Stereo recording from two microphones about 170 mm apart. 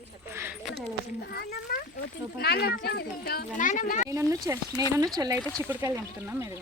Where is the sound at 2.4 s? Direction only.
70° left (ahead or behind); by 4.1 s 50° left (ahead or behind).